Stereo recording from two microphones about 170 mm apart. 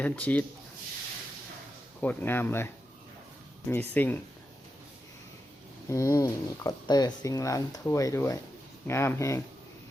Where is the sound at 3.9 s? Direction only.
10° left (ahead or behind).